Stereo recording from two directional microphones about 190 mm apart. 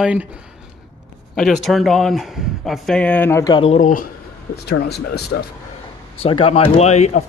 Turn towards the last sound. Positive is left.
turn(degrees=35)  # may be behind; listen again after turning